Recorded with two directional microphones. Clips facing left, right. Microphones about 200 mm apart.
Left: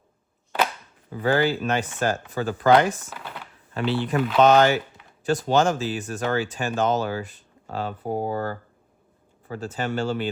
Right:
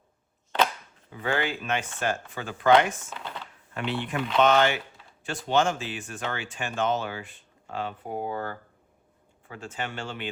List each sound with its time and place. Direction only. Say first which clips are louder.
1.1 s speech: left 7 dB; 35° left (ahead or behind)
3.1 s a sound: even; 10° left (ahead or behind)
3.8 s speech: left 6 dB; 35° left (ahead or behind)